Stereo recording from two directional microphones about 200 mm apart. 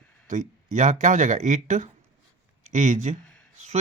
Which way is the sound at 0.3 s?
35° right (ahead or behind).